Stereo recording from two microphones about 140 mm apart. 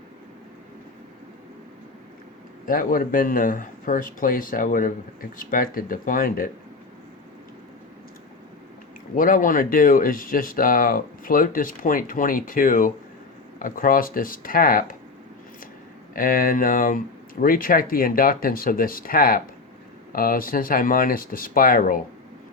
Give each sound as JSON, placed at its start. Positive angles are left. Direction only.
{"t": 2.6, "sound": "speech", "side_deg": 85}
{"t": 5.4, "sound": "speech", "side_deg": 85}
{"t": 9.1, "sound": "speech", "side_deg": 75}
{"t": 16.1, "sound": "speech", "side_deg": 90}
{"t": 17.4, "sound": "speech", "side_deg": 90}